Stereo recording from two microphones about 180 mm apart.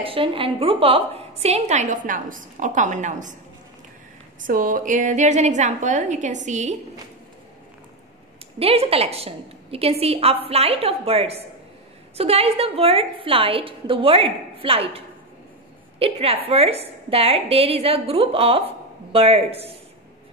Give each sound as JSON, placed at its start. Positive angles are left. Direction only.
{"t": 0.0, "sound": "a woman's voice", "side_deg": -30}
{"t": 4.5, "sound": "a woman's voice", "side_deg": -50}
{"t": 8.5, "sound": "a woman's voice", "side_deg": -35}